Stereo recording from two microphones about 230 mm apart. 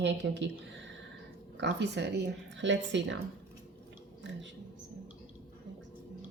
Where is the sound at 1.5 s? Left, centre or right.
Right.